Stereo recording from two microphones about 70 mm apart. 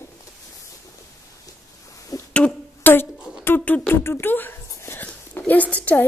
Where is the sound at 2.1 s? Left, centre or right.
Left.